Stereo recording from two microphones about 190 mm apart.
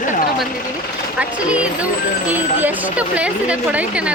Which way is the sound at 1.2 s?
5° right (ahead or behind).